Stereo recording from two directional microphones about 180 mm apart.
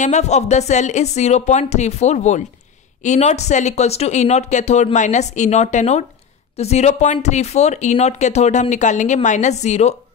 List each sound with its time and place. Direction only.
0.0 s speech: 40° left (ahead or behind)